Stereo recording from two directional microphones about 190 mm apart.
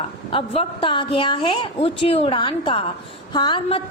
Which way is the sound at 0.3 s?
25° left (ahead or behind).